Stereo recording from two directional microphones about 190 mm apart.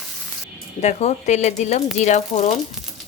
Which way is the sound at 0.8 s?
35° left (ahead or behind).